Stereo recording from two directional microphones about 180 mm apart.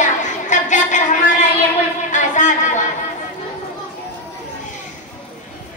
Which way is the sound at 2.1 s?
45° left (ahead or behind).